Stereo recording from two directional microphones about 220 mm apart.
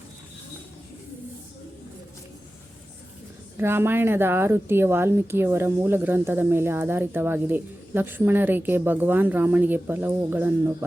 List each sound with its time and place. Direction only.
3.6 s speech: 10° right (ahead or behind)